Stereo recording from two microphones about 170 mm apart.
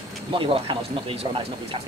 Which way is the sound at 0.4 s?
30° right (ahead or behind).